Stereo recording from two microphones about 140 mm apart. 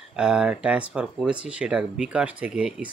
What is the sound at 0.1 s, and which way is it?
Speech, 5° right (ahead or behind).